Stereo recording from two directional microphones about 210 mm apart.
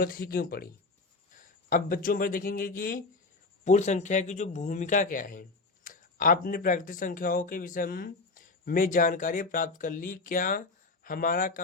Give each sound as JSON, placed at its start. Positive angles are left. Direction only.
{"t": 0.0, "sound": "speech", "side_deg": 45}